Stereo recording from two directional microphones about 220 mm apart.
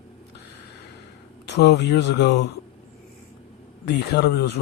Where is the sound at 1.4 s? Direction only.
50° left (ahead or behind).